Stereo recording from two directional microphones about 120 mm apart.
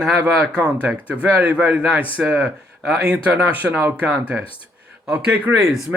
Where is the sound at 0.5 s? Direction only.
10° right (ahead or behind).